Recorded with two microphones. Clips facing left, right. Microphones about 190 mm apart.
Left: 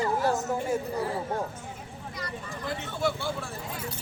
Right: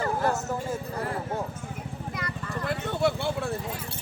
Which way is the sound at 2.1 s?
60° right (ahead or behind).